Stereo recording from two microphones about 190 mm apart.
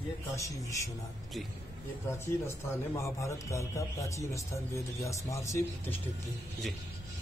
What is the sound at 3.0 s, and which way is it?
A man's voice, 15° left (ahead or behind).